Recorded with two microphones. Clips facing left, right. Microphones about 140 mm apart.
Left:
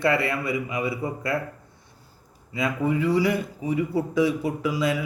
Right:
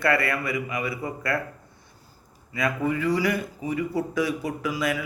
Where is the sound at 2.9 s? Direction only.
25° left (ahead or behind).